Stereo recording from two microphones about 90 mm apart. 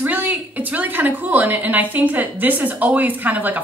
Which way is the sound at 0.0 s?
20° right (ahead or behind).